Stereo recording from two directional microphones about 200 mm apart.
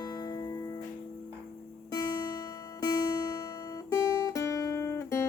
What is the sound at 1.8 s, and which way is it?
Music, 20° left (ahead or behind).